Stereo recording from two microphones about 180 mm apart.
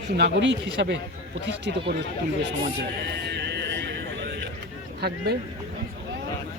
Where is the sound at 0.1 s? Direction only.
70° right (ahead or behind).